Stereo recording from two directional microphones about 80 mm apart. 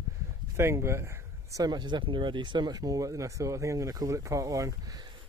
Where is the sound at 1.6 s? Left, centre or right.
Right.